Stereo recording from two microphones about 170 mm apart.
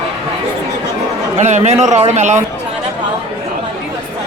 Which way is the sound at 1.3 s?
45° right (ahead or behind).